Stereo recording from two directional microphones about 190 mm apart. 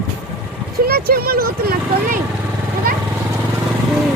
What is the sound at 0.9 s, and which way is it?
Speech, 55° right (ahead or behind).